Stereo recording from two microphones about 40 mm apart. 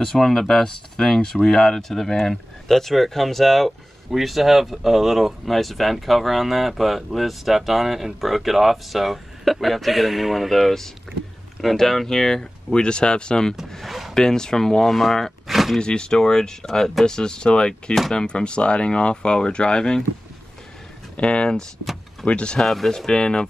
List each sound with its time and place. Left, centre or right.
0.0 s speech: centre
11.6 s speech: centre
13.7 s speech: centre
14.1 s speech: centre
15.4 s a sound: centre
15.8 s speech: left
21.2 s speech: left
22.6 s speech: centre